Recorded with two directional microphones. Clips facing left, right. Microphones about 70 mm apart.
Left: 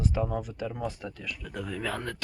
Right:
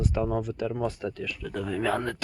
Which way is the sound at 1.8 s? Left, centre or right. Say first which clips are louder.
Right 7 dB; right.